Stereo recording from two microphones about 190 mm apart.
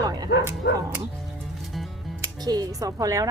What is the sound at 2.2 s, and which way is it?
Speech, 20° right (ahead or behind).